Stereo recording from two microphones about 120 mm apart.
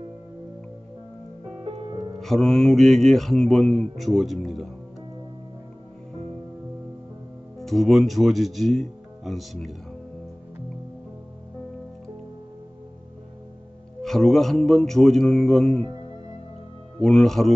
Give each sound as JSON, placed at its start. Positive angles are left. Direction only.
{"t": 1.6, "sound": "music", "side_deg": -45}
{"t": 2.1, "sound": "speech", "side_deg": 5}
{"t": 7.5, "sound": "speech", "side_deg": 0}
{"t": 14.0, "sound": "speech", "side_deg": 5}
{"t": 17.0, "sound": "speech", "side_deg": 5}